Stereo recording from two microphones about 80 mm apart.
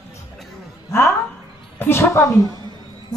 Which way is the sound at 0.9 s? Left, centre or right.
Left.